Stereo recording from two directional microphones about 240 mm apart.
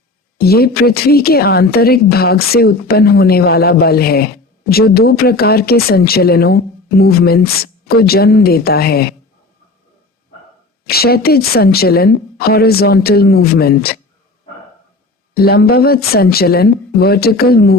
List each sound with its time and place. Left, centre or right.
0.3 s speech: left
10.8 s speech: left
15.4 s speech: left